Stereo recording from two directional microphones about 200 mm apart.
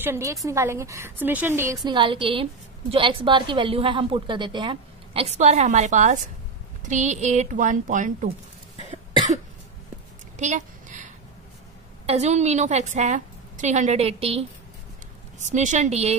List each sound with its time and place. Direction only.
0.0 s speech: 15° right (ahead or behind)
1.9 s a woman's voice: 25° right (ahead or behind)
10.3 s a sound: 35° right (ahead or behind)
12.1 s a woman's voice: 35° right (ahead or behind)